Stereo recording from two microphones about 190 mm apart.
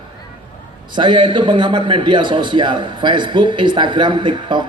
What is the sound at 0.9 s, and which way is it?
A man's voice, 25° right (ahead or behind).